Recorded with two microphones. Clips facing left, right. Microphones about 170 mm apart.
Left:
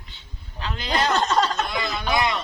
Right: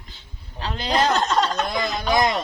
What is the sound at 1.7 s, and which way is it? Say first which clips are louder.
Speech: right 3 dB; 40° right (ahead or behind).